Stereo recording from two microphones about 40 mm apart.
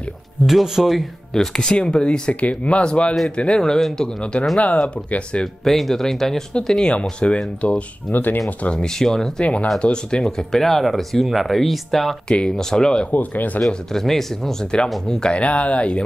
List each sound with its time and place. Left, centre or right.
0.5 s speech: centre
1.3 s speech: centre
4.2 s speech: left
5.6 s speech: centre
6.7 s speech: left
8.1 s speech: left
8.7 s speech: centre
9.4 s speech: left; by 12.2 s centre
12.3 s speech: centre
13.1 s speech: left
13.9 s speech: centre
15.3 s speech: left